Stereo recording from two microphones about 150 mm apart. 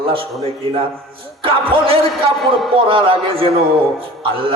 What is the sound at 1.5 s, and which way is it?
A man's voice, 35° right (ahead or behind).